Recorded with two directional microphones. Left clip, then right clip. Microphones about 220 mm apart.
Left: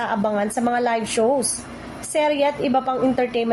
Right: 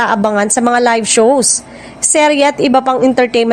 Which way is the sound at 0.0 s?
45° right (ahead or behind).